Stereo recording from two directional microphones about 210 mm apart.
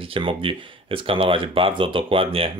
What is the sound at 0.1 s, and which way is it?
Speech, 25° right (ahead or behind).